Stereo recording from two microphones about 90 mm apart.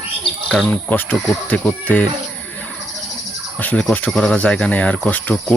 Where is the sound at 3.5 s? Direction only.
20° left (ahead or behind).